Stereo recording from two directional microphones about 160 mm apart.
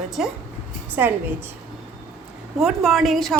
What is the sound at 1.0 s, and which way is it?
Speech, 15° right (ahead or behind).